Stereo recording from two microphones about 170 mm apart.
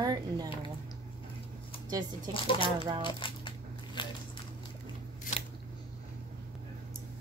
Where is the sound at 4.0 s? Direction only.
25° left (ahead or behind).